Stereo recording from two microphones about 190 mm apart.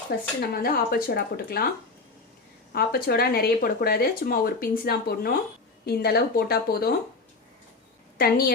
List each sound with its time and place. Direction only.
0.5 s speech: 50° left (ahead or behind)
2.7 s speech: 55° left (ahead or behind)
8.2 s speech: 50° left (ahead or behind)